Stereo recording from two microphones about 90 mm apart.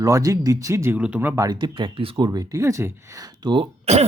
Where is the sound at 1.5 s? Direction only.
60° right (ahead or behind); by 2.2 s 85° right.